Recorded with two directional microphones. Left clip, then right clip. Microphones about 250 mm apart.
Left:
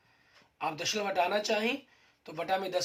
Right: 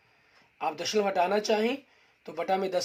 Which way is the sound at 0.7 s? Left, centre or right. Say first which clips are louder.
Right 5 dB; right.